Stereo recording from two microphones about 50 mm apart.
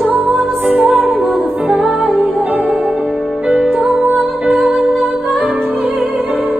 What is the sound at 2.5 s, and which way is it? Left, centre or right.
Music, right.